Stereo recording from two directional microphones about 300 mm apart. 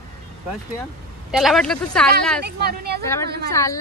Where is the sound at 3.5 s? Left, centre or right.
Centre.